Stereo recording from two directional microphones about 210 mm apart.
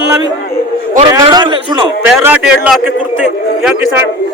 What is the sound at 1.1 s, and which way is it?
Speech, 20° right (ahead or behind).